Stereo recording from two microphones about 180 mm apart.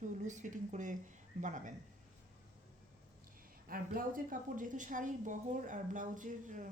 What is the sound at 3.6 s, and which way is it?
A woman's voice, 55° right (ahead or behind).